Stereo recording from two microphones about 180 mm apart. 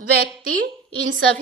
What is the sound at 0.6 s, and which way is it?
Speech, 50° right (ahead or behind).